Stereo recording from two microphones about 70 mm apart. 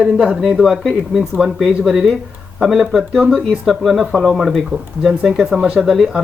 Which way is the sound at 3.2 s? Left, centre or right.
Centre.